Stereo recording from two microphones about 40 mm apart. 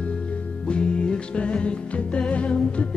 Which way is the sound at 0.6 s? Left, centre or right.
Left.